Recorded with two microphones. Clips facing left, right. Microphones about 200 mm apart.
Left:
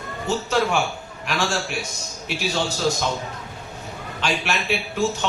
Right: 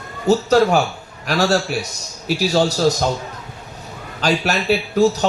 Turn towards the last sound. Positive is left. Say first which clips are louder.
# right 8 dB
turn(degrees=-40)  # may be behind; listen again after turning